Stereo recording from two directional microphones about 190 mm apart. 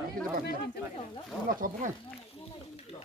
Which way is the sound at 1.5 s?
45° right (ahead or behind).